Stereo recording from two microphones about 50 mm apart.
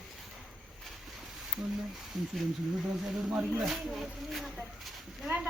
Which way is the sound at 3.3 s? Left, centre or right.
Right.